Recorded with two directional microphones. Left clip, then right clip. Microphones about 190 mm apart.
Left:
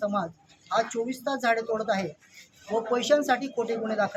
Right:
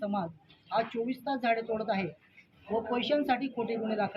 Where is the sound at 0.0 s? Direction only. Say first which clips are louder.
Left 6 dB; 20° left (ahead or behind).